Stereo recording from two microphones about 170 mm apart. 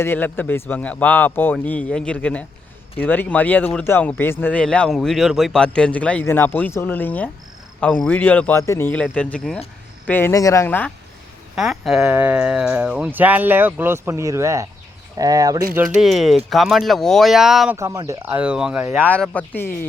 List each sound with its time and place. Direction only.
0.0 s speech: 10° left (ahead or behind)
11.5 s speech: centre (ahead or behind); by 15.6 s 20° right (ahead or behind)
16.0 s speech: centre (ahead or behind)
17.7 s speech: 20° right (ahead or behind)
19.0 s speech: 10° left (ahead or behind)